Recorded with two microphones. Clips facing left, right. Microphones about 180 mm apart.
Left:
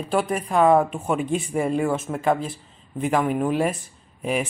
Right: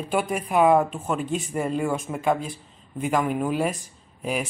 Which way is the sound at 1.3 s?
5° left (ahead or behind).